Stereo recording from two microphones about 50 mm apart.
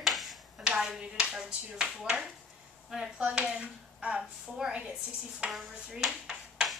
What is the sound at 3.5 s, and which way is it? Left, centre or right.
Speech, right.